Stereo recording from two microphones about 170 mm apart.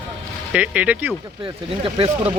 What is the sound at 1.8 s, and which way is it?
Speech, 35° right (ahead or behind).